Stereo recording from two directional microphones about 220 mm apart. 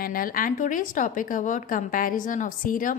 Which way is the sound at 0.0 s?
40° left (ahead or behind).